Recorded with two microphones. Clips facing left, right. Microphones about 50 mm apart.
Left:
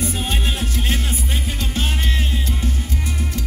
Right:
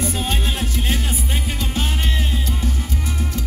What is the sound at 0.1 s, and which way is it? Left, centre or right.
Music, left.